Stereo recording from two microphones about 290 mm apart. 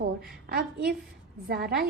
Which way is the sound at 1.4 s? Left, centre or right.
Right.